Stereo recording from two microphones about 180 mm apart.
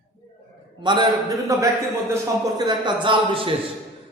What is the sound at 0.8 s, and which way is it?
A man's voice, 25° right (ahead or behind).